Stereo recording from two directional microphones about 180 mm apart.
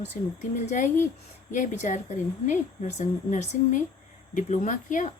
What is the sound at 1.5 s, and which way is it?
A woman's voice, 45° left (ahead or behind).